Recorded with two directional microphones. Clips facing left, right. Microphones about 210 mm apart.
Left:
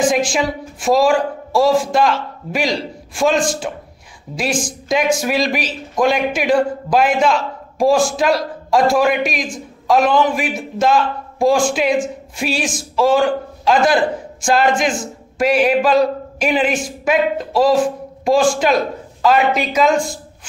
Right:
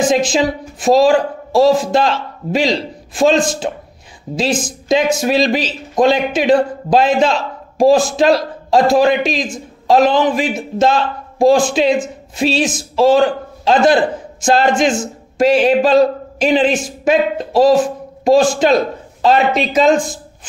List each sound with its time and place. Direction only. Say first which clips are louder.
0.0 s a woman's voice: right 2 dB; 20° right (ahead or behind)